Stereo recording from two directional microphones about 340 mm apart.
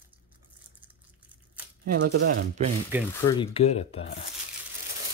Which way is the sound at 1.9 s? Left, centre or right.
Right.